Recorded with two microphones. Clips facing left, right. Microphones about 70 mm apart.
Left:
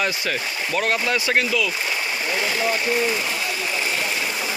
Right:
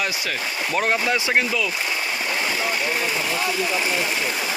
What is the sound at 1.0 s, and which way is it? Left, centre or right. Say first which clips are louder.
Speech: even; centre.